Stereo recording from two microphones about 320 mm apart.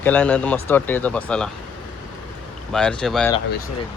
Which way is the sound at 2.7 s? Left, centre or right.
Centre.